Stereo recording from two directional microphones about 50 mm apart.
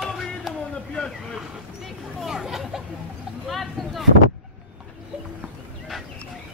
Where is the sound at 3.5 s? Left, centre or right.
Centre.